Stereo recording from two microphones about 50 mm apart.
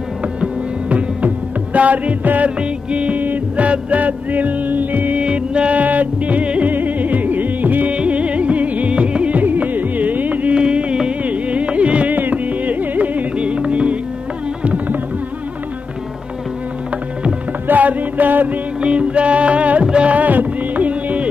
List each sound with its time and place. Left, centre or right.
0.8 s music: right
5.2 s music: right
7.9 s music: right
10.5 s music: right
17.6 s music: right
18.8 s music: right